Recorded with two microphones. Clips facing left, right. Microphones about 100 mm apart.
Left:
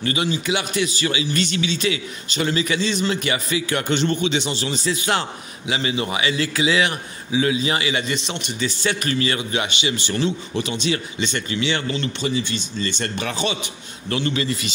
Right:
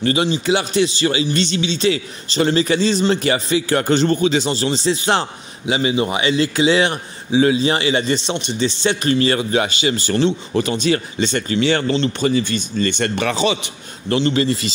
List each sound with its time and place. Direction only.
0.0 s a man's voice: 30° right (ahead or behind); by 13.7 s 90° right
14.0 s speech: 30° right (ahead or behind)